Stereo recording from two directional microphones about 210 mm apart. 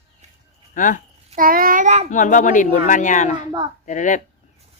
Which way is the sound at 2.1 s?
40° left (ahead or behind).